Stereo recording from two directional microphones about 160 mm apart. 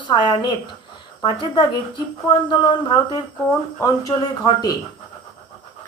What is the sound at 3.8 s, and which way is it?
Speech, 20° left (ahead or behind).